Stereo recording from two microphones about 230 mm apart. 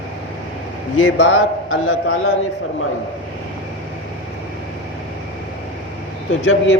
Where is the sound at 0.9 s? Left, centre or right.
Left.